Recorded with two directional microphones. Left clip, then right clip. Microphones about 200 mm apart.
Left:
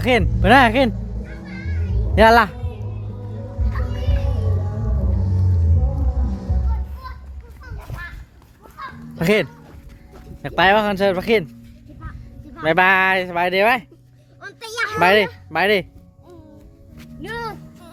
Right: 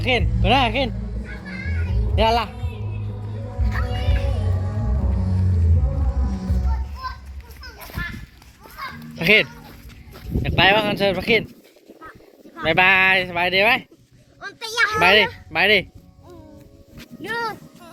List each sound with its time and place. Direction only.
0.0 s speech: 45° left (ahead or behind)
2.1 s speech: 50° left (ahead or behind)
3.7 s music: 25° right (ahead or behind)
9.1 s speech: 30° left (ahead or behind)
12.6 s speech: 30° left (ahead or behind)
14.4 s a sound: 20° left (ahead or behind)
14.9 s speech: 35° left (ahead or behind)
17.0 s a sound: centre (ahead or behind)